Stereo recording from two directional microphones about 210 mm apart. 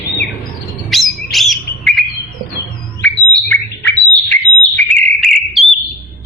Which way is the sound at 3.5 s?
5° left (ahead or behind).